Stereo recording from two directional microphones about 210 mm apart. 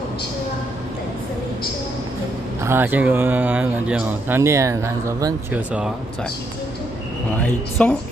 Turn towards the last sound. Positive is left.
turn(degrees=5)  # may be behind; listen again after turning